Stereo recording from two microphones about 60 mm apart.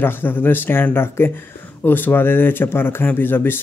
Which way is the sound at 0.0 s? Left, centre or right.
Left.